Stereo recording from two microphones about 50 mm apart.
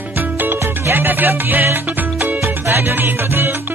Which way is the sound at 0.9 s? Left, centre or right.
Right.